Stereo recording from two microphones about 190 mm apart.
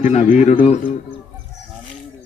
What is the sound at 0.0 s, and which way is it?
Speech, 35° left (ahead or behind).